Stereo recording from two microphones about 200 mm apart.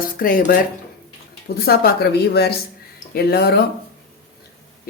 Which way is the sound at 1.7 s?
50° left (ahead or behind).